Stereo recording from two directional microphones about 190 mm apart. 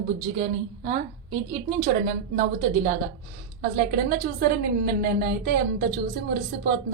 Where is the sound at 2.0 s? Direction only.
45° right (ahead or behind).